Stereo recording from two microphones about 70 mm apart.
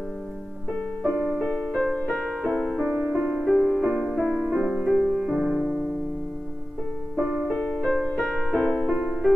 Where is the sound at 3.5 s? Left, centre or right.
Centre.